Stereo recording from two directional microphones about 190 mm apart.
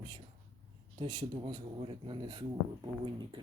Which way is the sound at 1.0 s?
25° right (ahead or behind).